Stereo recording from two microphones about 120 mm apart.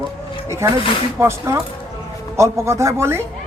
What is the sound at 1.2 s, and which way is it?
A woman's voice, 25° right (ahead or behind).